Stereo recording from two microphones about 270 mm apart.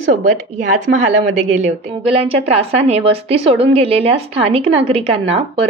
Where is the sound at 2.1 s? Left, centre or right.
Right.